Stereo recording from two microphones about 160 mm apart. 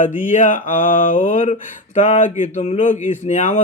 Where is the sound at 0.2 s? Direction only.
55° left (ahead or behind).